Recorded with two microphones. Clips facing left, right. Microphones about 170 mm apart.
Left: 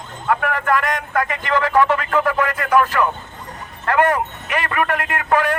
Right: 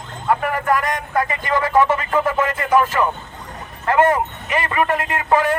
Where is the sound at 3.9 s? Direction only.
20° right (ahead or behind).